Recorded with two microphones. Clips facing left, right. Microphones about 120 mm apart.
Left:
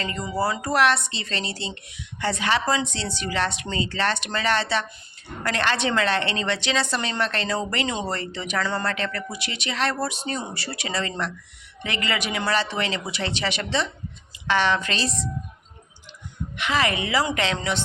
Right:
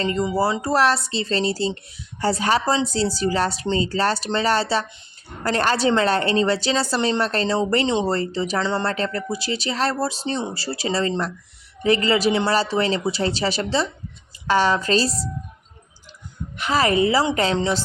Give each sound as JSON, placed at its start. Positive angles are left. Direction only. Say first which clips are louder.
{"t": 0.0, "sound": "a woman's voice", "louder": "right 5 dB", "side_deg": -30}
{"t": 16.6, "sound": "a woman's voice", "louder": "right 5 dB", "side_deg": -40}